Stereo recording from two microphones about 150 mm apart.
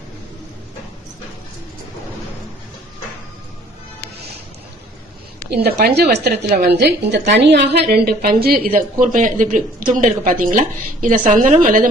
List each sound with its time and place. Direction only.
5.5 s a woman's voice: 90° right; by 11.9 s 65° right (ahead or behind)